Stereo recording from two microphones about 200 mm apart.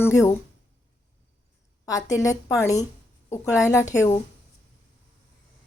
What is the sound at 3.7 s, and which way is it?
Speech, 15° left (ahead or behind).